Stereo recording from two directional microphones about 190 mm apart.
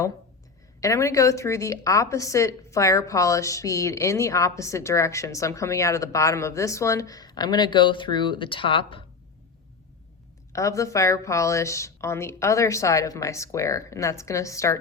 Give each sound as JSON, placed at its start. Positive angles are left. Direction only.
{"t": 0.8, "sound": "a woman's voice", "side_deg": 15}
{"t": 10.5, "sound": "a woman's voice", "side_deg": 15}